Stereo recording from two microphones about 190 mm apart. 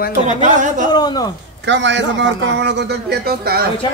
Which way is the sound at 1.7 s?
70° right (ahead or behind).